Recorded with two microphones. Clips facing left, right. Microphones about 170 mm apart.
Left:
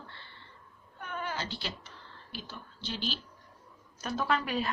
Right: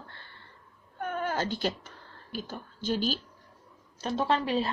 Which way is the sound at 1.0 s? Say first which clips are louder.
Right 7 dB; 45° right (ahead or behind).